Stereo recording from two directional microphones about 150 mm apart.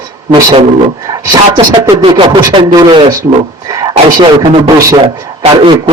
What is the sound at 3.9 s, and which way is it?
Speech, 40° right (ahead or behind).